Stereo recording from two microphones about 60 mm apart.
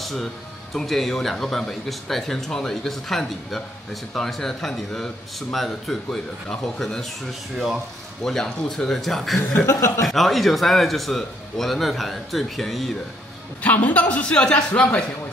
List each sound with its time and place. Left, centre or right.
0.0 s a man's voice: centre
9.7 s speech: left
10.0 s a man's voice: centre
13.6 s a man's voice: left
14.7 s a man's voice: left